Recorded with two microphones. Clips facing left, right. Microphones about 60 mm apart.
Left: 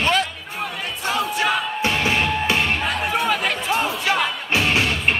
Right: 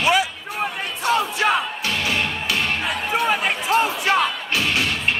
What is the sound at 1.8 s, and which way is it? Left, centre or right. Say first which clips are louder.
Music: left 3 dB; left.